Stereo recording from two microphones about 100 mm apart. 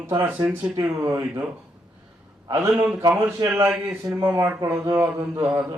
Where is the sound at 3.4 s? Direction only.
45° right (ahead or behind); by 5.6 s 30° right (ahead or behind).